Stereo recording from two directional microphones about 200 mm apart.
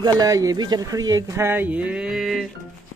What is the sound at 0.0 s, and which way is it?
Speech, 20° right (ahead or behind).